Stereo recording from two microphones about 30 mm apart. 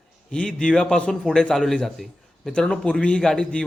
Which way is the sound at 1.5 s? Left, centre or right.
Centre.